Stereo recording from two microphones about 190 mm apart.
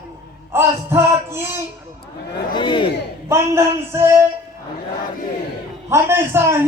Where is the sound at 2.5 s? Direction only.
25° left (ahead or behind).